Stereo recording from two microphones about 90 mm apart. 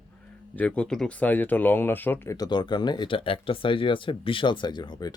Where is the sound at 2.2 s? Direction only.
45° left (ahead or behind).